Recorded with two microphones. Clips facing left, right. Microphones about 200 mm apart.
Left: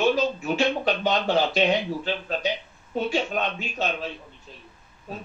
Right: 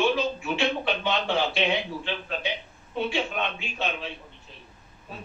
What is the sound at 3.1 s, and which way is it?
Speech, 40° left (ahead or behind).